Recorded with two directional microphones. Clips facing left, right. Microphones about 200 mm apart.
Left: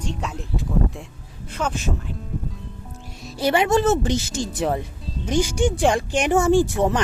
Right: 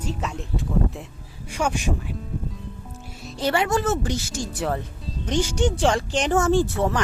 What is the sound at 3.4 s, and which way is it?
Speech, 15° left (ahead or behind).